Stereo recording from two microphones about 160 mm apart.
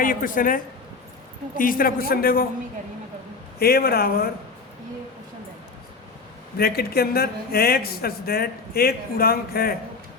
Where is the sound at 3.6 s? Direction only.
75° left (ahead or behind).